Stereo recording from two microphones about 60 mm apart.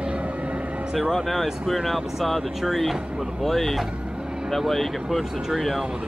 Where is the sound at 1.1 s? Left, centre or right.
Centre.